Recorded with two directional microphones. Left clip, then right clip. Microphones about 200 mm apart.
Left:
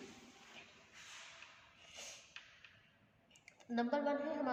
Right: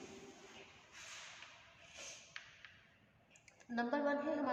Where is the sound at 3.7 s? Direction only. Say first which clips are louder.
Left 1 dB; 30° left (ahead or behind).